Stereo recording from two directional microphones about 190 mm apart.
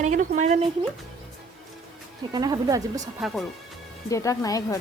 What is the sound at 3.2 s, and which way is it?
Speech, centre (ahead or behind).